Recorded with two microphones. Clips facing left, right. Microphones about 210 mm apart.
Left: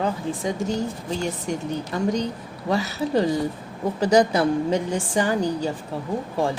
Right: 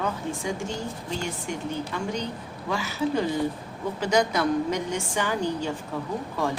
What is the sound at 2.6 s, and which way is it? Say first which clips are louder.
A woman's voice: left 3 dB; 35° left (ahead or behind).